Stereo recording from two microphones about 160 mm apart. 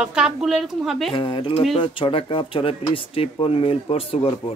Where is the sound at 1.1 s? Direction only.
30° left (ahead or behind).